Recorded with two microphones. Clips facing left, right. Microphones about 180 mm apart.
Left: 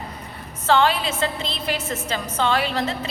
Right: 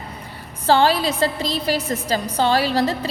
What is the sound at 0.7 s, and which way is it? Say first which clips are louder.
A woman's voice: right 3 dB; 35° right (ahead or behind).